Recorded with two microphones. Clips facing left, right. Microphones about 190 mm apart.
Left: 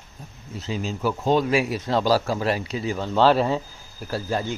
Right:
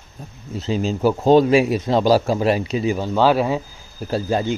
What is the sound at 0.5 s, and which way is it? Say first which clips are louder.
Speech: right 7 dB; 30° right (ahead or behind).